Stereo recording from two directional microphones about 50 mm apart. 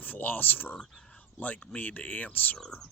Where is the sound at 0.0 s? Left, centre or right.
Left.